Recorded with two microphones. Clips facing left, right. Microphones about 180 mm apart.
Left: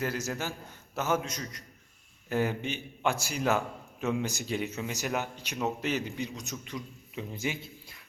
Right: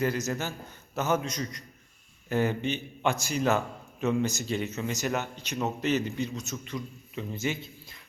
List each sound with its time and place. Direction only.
0.0 s a man's voice: 5° left (ahead or behind)